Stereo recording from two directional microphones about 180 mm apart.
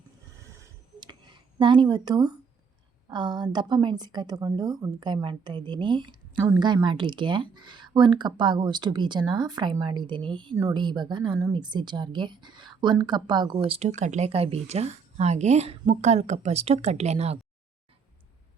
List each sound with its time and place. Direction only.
0.4 s a sound: 15° right (ahead or behind)
3.1 s speech: 25° right (ahead or behind)
13.7 s speech: 40° right (ahead or behind)